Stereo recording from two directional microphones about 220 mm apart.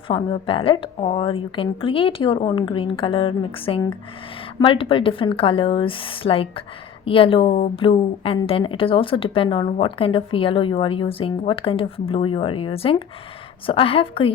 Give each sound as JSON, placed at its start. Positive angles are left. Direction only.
{"t": 0.1, "sound": "a woman's voice", "side_deg": 25}